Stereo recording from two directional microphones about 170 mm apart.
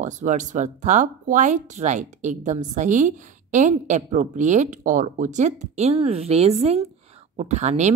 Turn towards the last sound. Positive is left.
turn(degrees=-40)  # may be behind; listen again after turning